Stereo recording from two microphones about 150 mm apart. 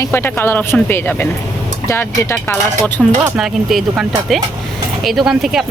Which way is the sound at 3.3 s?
Centre (ahead or behind).